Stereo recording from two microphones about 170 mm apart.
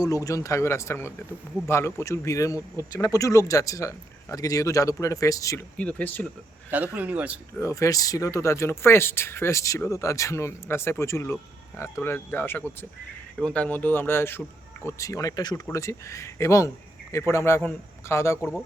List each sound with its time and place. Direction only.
0.0 s speech: 20° left (ahead or behind)
5.7 s speech: 10° left (ahead or behind)
6.7 s speech: 10° right (ahead or behind)
7.6 s speech: 20° left (ahead or behind)